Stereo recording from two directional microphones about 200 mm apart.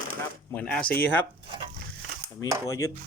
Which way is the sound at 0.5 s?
5° left (ahead or behind).